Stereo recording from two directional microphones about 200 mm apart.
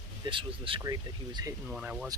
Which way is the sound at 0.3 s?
25° right (ahead or behind).